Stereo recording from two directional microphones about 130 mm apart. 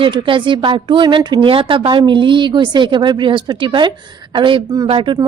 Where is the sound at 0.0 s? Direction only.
40° right (ahead or behind).